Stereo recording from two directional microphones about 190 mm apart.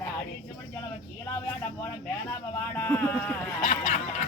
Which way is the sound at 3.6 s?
40° left (ahead or behind).